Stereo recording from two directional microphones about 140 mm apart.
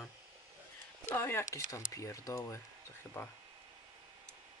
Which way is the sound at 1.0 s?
15° left (ahead or behind).